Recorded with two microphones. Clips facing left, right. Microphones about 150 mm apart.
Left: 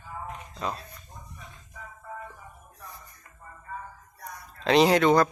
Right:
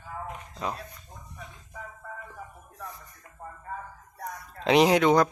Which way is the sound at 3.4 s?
60° right (ahead or behind).